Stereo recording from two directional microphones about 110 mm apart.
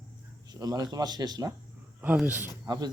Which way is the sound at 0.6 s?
35° right (ahead or behind).